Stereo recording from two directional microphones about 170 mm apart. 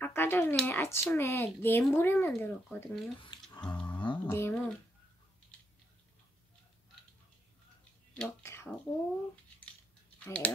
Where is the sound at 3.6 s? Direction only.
10° left (ahead or behind).